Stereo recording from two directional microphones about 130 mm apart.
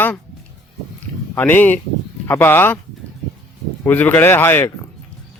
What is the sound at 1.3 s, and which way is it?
Speech, 15° left (ahead or behind).